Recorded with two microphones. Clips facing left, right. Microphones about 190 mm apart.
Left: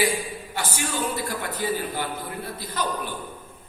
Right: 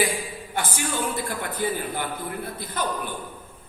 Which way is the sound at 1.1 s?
50° right (ahead or behind).